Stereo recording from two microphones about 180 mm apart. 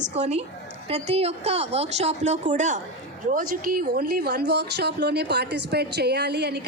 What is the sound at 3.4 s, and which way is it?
A man's voice, 55° right (ahead or behind).